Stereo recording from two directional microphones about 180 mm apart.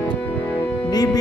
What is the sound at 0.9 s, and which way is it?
Music, 20° left (ahead or behind).